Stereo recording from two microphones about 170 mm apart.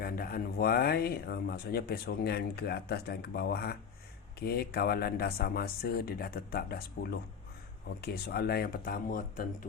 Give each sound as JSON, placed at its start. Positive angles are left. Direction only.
{"t": 0.0, "sound": "speech", "side_deg": 60}